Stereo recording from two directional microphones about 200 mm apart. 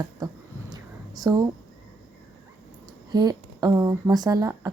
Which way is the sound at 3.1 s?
20° right (ahead or behind).